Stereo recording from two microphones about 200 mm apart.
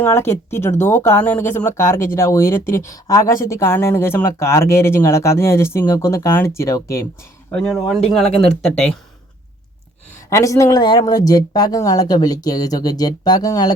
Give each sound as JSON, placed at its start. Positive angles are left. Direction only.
{"t": 0.0, "sound": "speech", "side_deg": 10}
{"t": 7.5, "sound": "speech", "side_deg": 0}
{"t": 10.2, "sound": "speech", "side_deg": 15}